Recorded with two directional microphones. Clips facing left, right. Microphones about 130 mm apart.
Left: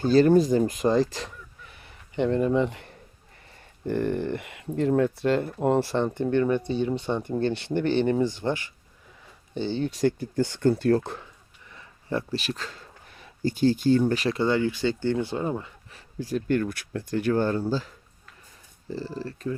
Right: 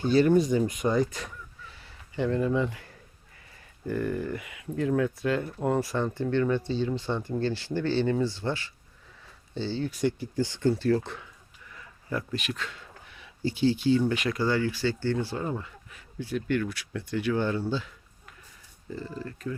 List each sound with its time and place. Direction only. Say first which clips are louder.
0.0 s speech: left 3 dB; 40° left (ahead or behind)
1.1 s a sound: left 3 dB; 25° left (ahead or behind)
3.8 s speech: left 4 dB; 30° left (ahead or behind)
10.0 s speech: left 4 dB; 55° left (ahead or behind)
11.7 s speech: left 4 dB; 30° left (ahead or behind)
16.0 s speech: left 3 dB; 40° left (ahead or behind)